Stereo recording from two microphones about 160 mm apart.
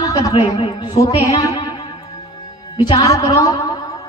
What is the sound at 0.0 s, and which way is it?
A woman's voice, 25° left (ahead or behind).